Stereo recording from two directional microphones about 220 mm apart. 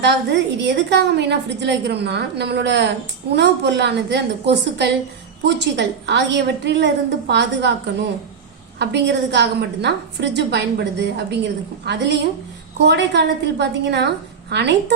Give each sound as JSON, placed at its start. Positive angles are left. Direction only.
{"t": 0.0, "sound": "a woman's voice", "side_deg": -50}
{"t": 8.8, "sound": "a woman's voice", "side_deg": -50}